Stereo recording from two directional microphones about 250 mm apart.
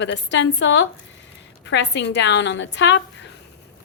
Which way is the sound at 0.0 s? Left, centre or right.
Left.